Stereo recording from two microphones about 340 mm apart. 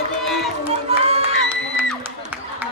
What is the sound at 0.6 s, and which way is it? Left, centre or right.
Run, centre.